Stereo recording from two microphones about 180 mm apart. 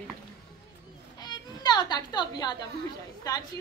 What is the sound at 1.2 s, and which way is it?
A woman's voice, 25° left (ahead or behind).